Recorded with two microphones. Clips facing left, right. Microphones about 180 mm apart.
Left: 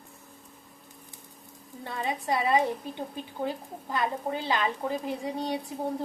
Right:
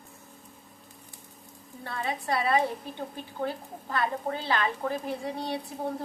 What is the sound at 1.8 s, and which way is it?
Speech, 20° left (ahead or behind).